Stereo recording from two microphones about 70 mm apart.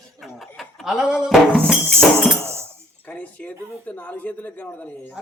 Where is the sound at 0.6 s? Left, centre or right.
Centre.